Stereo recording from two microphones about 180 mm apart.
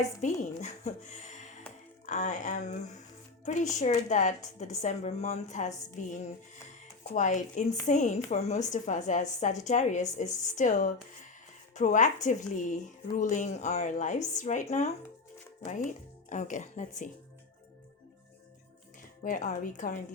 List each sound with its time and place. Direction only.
0.2 s a woman's voice: 40° left (ahead or behind)
7.1 s a woman's voice: 45° left (ahead or behind)
19.2 s speech: 45° left (ahead or behind)